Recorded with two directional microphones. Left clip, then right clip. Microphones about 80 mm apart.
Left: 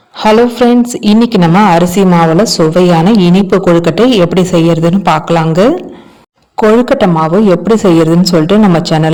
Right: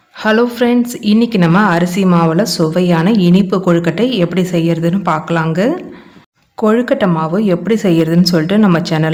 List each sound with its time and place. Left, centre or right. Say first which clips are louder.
0.2 s a woman's voice: left 6 dB; left
2.8 s speech: left 6 dB; left
6.6 s a man's voice: left 5 dB; left